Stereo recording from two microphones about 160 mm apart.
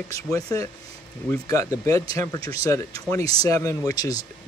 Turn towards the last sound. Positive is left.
turn(degrees=20)  # may be behind; listen again after turning